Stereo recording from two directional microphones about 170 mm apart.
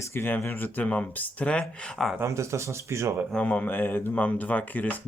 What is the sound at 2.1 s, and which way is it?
Speech, 15° right (ahead or behind).